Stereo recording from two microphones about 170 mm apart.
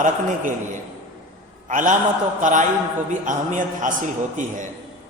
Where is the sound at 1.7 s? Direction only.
50° right (ahead or behind).